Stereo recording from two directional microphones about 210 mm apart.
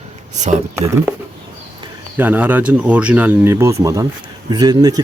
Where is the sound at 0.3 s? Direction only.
35° right (ahead or behind).